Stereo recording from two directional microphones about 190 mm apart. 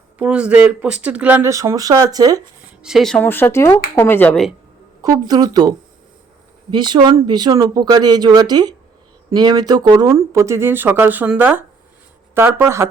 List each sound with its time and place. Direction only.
0.2 s speech: 5° right (ahead or behind)
2.8 s speech: centre (ahead or behind)
5.0 s speech: 20° right (ahead or behind)